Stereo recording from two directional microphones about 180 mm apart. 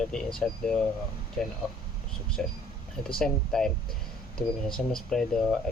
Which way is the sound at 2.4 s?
5° left (ahead or behind).